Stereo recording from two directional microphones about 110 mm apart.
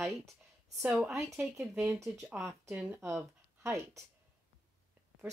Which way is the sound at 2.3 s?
25° right (ahead or behind).